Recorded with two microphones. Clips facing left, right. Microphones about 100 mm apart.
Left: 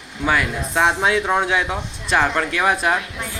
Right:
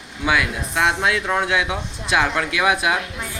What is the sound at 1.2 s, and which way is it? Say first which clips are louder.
Speech: left 2 dB; 15° left (ahead or behind).